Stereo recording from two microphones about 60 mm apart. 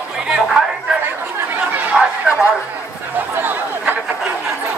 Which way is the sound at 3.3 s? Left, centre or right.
Right.